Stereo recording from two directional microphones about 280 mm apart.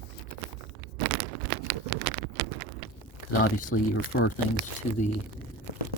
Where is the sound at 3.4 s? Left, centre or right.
Left.